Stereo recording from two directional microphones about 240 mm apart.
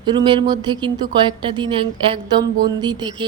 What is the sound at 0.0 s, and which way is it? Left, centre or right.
A woman's voice, centre.